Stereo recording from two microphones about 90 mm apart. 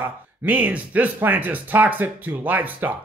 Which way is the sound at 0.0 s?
20° right (ahead or behind).